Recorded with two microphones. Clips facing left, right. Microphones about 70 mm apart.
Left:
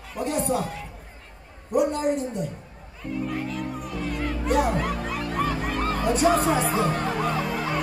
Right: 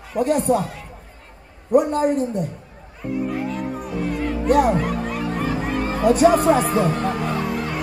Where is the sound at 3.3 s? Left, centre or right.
Centre.